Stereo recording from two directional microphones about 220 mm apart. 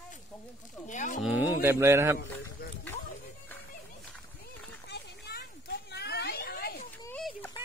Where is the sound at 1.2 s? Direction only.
10° right (ahead or behind).